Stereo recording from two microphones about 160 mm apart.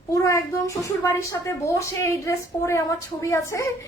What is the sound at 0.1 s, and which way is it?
A woman's voice, 20° left (ahead or behind).